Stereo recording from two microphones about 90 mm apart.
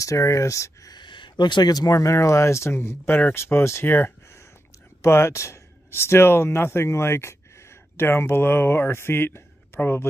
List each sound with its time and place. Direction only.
0.0 s speech: 35° left (ahead or behind)
0.9 s speech: 65° left (ahead or behind); by 10.0 s 25° left (ahead or behind)